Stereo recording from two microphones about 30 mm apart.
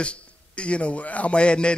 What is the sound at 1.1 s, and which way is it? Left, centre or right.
Speech, left.